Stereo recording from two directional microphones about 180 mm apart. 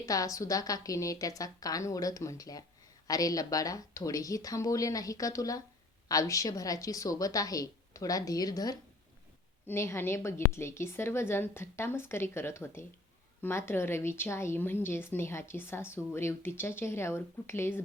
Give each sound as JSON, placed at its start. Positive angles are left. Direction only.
{"t": 0.0, "sound": "a woman's voice", "side_deg": 20}